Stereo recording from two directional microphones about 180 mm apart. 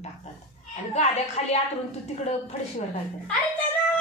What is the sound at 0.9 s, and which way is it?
Speech, 40° left (ahead or behind).